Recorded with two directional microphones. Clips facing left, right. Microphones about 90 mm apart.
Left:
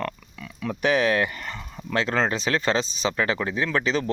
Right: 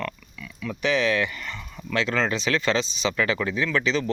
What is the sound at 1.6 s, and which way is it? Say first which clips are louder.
Speech: left 1 dB; 30° left (ahead or behind).